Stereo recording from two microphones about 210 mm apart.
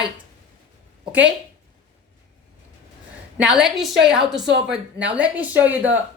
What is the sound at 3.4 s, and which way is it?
A woman's voice, 5° right (ahead or behind).